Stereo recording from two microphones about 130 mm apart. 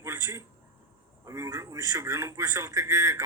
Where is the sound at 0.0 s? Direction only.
20° right (ahead or behind).